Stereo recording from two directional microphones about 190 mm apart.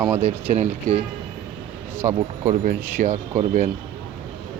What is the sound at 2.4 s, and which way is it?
Speech, 45° right (ahead or behind).